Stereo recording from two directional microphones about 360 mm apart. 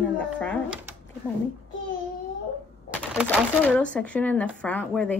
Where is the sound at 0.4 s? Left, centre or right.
Centre.